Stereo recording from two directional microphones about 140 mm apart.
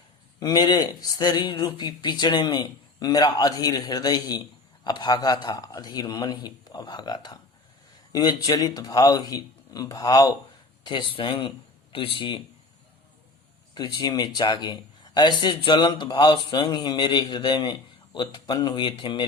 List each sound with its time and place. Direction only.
0.3 s speech: 25° left (ahead or behind)
13.7 s a man's voice: 30° left (ahead or behind)